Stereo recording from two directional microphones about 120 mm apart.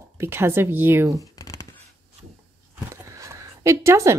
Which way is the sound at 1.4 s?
25° left (ahead or behind).